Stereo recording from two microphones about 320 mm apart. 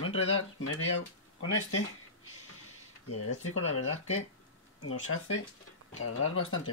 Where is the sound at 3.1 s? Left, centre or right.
Left.